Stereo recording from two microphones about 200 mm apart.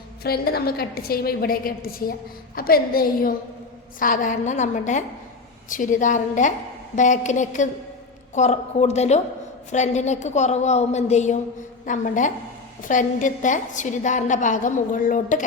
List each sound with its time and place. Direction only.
0.2 s a woman's voice: 50° left (ahead or behind)